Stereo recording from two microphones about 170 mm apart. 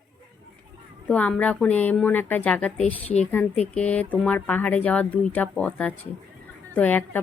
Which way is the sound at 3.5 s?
40° left (ahead or behind).